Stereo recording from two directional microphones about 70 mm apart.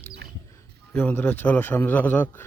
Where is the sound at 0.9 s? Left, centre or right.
Left.